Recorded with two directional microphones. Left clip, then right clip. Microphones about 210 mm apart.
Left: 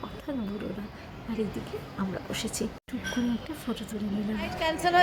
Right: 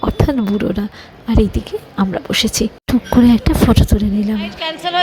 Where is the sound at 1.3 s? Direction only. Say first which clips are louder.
Right 16 dB; 45° right (ahead or behind).